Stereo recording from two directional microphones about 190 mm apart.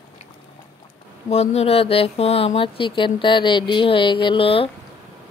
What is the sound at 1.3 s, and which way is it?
A woman's voice, 35° left (ahead or behind).